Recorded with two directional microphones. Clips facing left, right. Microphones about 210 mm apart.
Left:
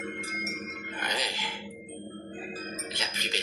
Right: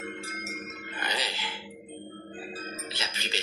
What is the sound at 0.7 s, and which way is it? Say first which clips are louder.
Music: even; 5° right (ahead or behind).